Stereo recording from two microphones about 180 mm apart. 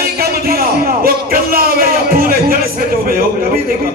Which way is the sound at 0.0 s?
55° right (ahead or behind).